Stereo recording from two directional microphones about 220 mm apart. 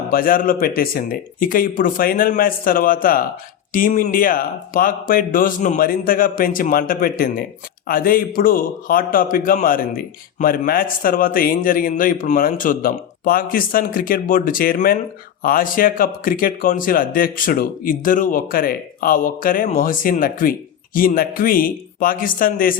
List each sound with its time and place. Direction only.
0.1 s a man's voice: 40° left (ahead or behind)